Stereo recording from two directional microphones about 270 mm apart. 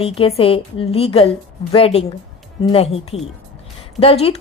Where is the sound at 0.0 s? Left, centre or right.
Left.